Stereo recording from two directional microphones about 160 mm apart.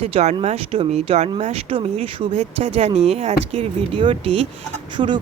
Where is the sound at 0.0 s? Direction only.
40° right (ahead or behind).